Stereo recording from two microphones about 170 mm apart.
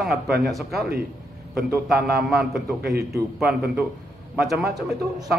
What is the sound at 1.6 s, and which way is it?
Speech, 65° right (ahead or behind).